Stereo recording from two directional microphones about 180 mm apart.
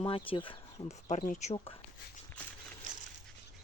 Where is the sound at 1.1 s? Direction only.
45° left (ahead or behind).